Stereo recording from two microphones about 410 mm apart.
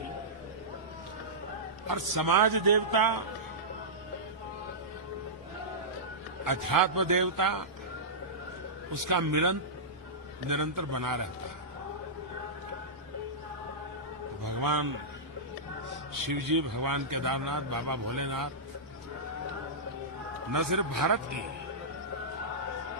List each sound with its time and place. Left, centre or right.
1.9 s a man's voice: right
6.4 s speech: right
8.9 s speech: right
14.4 s a sound: right
16.3 s speech: right
20.5 s speech: right